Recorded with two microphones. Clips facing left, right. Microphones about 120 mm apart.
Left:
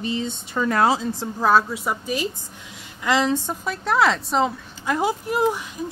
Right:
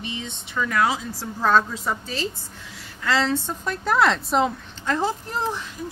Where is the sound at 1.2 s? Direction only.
10° left (ahead or behind).